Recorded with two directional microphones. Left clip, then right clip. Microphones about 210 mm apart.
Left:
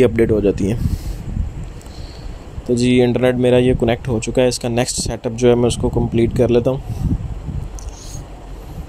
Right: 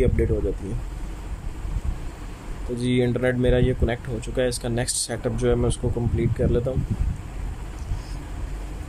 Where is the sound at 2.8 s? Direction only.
30° left (ahead or behind).